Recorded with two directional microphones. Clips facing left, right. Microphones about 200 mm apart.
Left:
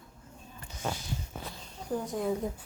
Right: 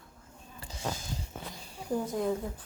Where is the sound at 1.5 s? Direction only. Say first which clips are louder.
Right 2 dB; 10° right (ahead or behind).